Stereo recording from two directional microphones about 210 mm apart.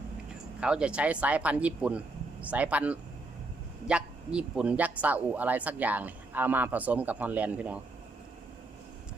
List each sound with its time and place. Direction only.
0.6 s speech: 5° right (ahead or behind)